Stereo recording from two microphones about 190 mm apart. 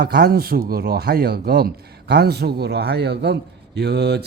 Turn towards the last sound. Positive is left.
turn(degrees=-60)  # may be behind; listen again after turning